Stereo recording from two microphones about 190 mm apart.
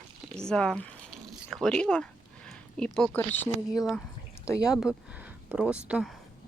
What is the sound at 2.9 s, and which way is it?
Speech, 10° left (ahead or behind).